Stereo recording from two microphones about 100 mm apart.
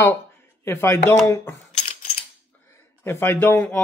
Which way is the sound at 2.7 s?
25° left (ahead or behind).